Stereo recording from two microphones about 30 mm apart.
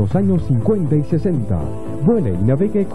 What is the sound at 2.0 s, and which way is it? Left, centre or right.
Speech, centre.